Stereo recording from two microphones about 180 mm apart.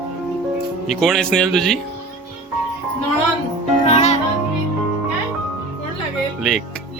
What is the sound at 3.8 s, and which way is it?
Music, 40° left (ahead or behind).